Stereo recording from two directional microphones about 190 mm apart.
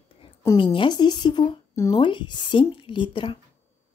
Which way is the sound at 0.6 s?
25° left (ahead or behind).